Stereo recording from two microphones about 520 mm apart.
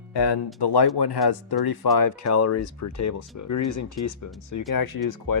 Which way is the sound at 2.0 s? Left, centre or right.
Left.